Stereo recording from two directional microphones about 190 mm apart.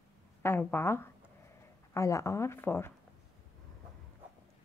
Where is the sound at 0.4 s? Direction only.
10° left (ahead or behind).